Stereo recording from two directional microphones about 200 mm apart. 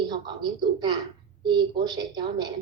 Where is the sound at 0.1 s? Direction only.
20° right (ahead or behind).